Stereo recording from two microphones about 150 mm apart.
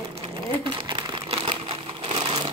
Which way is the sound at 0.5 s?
35° right (ahead or behind).